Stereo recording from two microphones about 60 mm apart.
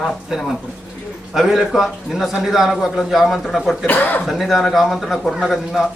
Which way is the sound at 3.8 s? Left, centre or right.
Left.